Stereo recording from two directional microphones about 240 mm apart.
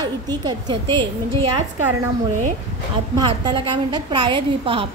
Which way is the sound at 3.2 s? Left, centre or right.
Centre.